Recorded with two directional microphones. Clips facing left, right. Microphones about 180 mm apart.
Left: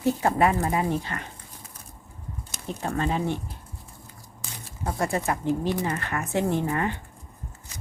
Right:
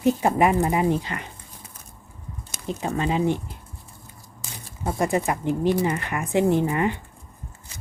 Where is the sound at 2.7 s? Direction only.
10° right (ahead or behind).